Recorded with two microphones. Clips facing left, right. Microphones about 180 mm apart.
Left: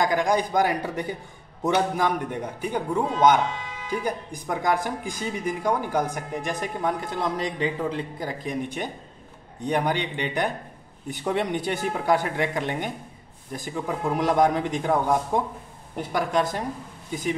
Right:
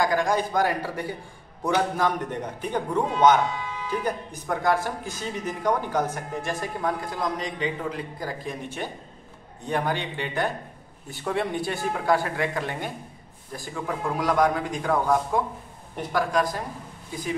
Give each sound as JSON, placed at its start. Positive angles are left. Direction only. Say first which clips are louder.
{"t": 0.0, "sound": "speech", "louder": "left 1 dB", "side_deg": 20}
{"t": 8.2, "sound": "speech", "louder": "left 3 dB", "side_deg": 20}